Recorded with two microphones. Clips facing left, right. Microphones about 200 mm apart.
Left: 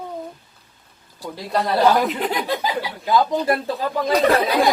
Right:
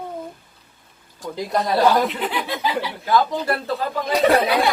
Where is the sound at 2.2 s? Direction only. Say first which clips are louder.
Left 2 dB; 40° left (ahead or behind).